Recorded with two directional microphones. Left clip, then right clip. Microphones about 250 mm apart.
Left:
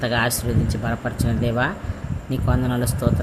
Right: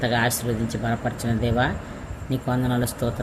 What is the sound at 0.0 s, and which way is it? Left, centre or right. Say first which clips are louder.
Speech: left 1 dB; centre.